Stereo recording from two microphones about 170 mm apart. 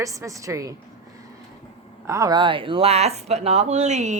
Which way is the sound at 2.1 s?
20° right (ahead or behind).